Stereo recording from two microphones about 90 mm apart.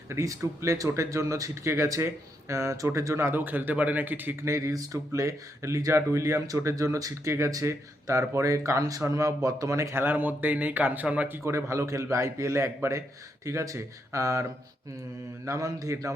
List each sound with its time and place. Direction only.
0.1 s speech: 35° right (ahead or behind)
4.4 s speech: 35° right (ahead or behind); by 11.3 s 15° right (ahead or behind)
11.4 s speech: 30° right (ahead or behind)
15.4 s speech: 35° right (ahead or behind)